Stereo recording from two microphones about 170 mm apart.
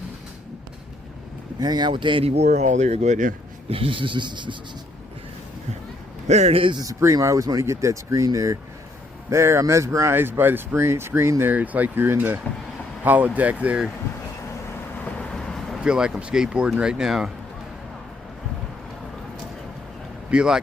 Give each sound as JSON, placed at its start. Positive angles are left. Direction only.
{"t": 1.5, "sound": "speech", "side_deg": -25}
{"t": 3.7, "sound": "speech", "side_deg": -35}
{"t": 6.2, "sound": "speech", "side_deg": -40}
{"t": 14.9, "sound": "speech", "side_deg": 5}
{"t": 20.3, "sound": "speech", "side_deg": -5}